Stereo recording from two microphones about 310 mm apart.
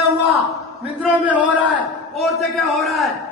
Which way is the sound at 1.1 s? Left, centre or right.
Centre.